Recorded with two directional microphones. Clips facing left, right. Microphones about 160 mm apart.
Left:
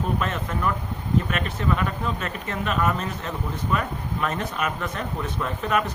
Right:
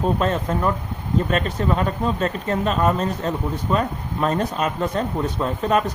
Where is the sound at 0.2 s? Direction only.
35° right (ahead or behind).